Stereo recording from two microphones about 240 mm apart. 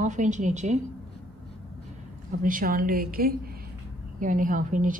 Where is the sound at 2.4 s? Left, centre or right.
Right.